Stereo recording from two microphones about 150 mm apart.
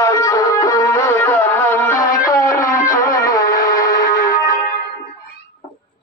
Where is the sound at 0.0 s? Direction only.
20° left (ahead or behind).